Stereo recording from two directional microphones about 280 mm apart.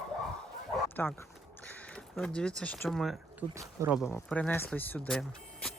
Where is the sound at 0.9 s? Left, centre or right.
Centre.